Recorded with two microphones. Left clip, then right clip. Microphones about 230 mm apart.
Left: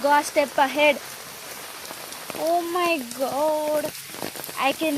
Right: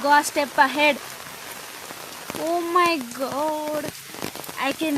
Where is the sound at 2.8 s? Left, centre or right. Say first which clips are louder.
Right 2 dB; centre.